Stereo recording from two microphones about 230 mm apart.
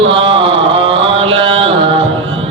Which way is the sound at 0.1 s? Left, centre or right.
Right.